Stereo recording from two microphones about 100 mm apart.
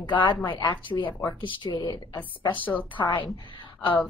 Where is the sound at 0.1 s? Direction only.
50° left (ahead or behind).